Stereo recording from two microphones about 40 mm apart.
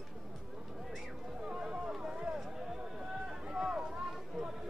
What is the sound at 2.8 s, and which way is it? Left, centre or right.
Run, right.